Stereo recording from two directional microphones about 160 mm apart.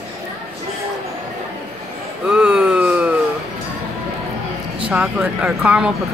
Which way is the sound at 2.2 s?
5° right (ahead or behind).